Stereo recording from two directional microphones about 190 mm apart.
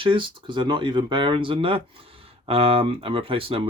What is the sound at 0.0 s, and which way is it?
Speech, 25° right (ahead or behind).